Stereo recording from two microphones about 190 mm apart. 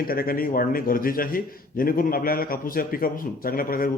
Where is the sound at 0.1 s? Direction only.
50° left (ahead or behind).